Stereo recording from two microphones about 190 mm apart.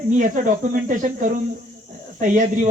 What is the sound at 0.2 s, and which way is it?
Speech, 40° right (ahead or behind).